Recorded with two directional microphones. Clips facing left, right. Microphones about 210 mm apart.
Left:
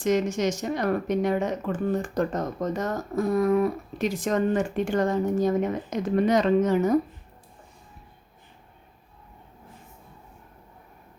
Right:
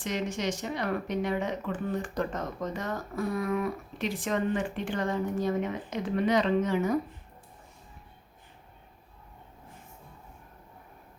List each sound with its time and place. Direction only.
0.0 s speech: 45° left (ahead or behind)